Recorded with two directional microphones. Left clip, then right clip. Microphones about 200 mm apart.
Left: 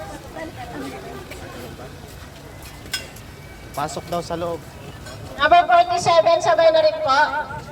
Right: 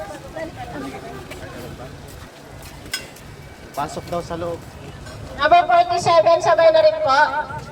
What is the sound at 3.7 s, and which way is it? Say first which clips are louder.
Speech: even; 45° left (ahead or behind).